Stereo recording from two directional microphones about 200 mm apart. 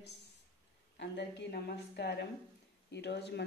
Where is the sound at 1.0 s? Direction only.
60° left (ahead or behind).